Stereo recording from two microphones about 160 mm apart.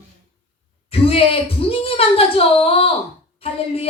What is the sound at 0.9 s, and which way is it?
A woman's voice, 35° left (ahead or behind).